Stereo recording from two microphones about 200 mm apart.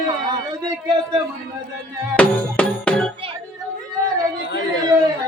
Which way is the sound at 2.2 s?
5° left (ahead or behind).